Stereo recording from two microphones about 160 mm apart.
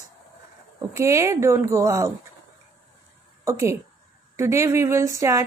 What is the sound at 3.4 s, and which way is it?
Speech, 20° right (ahead or behind).